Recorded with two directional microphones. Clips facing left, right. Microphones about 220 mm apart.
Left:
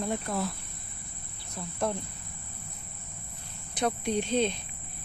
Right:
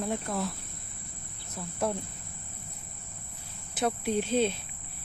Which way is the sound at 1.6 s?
5° right (ahead or behind).